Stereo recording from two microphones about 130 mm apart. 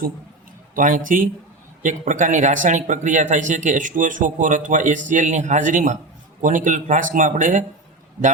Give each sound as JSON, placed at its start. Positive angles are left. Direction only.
{"t": 0.8, "sound": "speech", "side_deg": -90}
{"t": 1.8, "sound": "speech", "side_deg": -75}
{"t": 6.4, "sound": "speech", "side_deg": -90}